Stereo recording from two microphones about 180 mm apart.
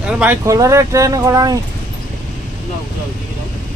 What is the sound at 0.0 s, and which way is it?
Speech, 10° right (ahead or behind).